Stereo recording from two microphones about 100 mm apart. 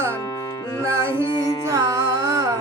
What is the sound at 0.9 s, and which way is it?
Music, 30° right (ahead or behind).